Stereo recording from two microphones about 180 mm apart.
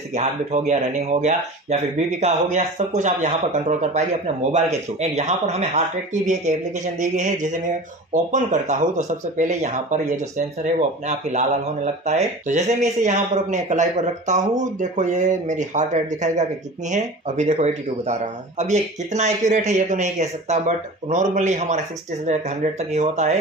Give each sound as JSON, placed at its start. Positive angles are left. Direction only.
{"t": 0.1, "sound": "speech", "side_deg": -40}